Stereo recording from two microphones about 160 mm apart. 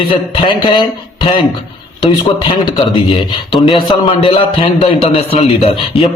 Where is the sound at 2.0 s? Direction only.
30° left (ahead or behind).